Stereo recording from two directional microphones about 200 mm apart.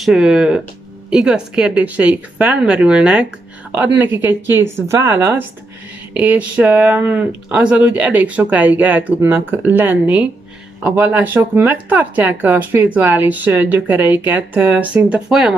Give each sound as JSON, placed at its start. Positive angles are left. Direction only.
{"t": 0.0, "sound": "speech", "side_deg": -5}